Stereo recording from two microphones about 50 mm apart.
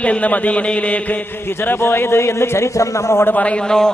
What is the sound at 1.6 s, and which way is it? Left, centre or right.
A man's voice, left.